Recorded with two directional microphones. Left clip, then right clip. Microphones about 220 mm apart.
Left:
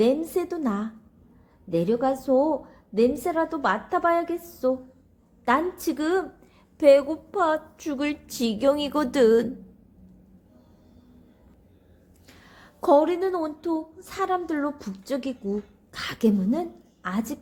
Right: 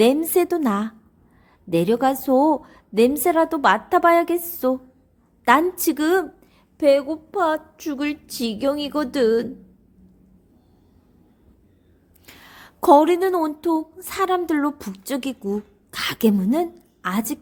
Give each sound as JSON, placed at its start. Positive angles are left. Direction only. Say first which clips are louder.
{"t": 0.0, "sound": "a woman's voice", "louder": "right 6 dB", "side_deg": -35}
{"t": 6.7, "sound": "a woman's voice", "louder": "even", "side_deg": -15}
{"t": 12.2, "sound": "a woman's voice", "louder": "right 7 dB", "side_deg": -30}